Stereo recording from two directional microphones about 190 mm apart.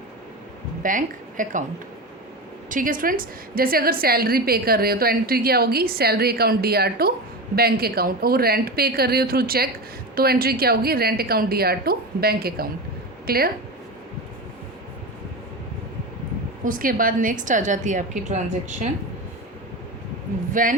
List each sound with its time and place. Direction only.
0.8 s a woman's voice: 45° right (ahead or behind)
2.6 s a woman's voice: 45° right (ahead or behind)
16.6 s a woman's voice: 45° right (ahead or behind)
20.5 s speech: 45° right (ahead or behind)